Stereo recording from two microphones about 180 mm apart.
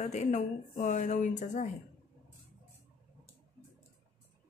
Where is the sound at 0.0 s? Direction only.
40° left (ahead or behind).